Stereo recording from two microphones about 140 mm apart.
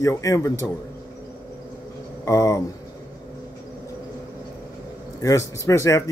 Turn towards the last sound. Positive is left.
turn(degrees=20)  # may be behind; listen again after turning